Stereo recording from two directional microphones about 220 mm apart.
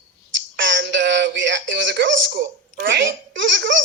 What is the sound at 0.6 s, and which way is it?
Speech, 55° right (ahead or behind).